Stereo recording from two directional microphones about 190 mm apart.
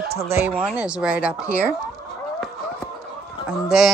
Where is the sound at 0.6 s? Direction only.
5° right (ahead or behind).